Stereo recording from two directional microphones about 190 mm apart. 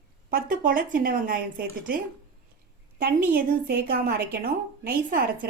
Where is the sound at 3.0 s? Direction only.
55° right (ahead or behind).